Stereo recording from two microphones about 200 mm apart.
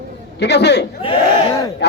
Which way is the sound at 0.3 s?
55° left (ahead or behind).